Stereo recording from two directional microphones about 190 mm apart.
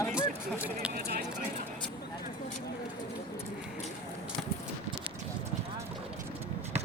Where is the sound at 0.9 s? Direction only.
55° right (ahead or behind).